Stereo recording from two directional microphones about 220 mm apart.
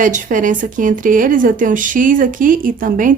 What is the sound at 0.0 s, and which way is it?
Speech, 35° right (ahead or behind).